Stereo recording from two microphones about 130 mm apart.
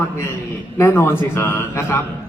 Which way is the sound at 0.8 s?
20° left (ahead or behind).